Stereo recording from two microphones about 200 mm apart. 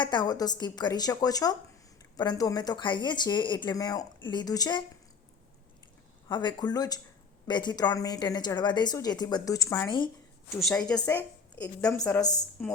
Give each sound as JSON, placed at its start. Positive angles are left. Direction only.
{"t": 0.0, "sound": "a woman's voice", "side_deg": 20}
{"t": 6.2, "sound": "a woman's voice", "side_deg": 20}
{"t": 10.7, "sound": "a woman's voice", "side_deg": 5}